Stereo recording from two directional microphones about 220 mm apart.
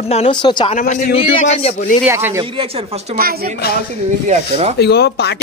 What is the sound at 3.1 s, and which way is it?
Speech, 40° right (ahead or behind).